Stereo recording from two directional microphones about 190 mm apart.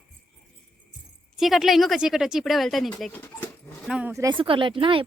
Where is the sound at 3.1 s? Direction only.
10° left (ahead or behind).